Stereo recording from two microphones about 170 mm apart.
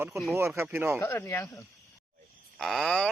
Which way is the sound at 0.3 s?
15° right (ahead or behind).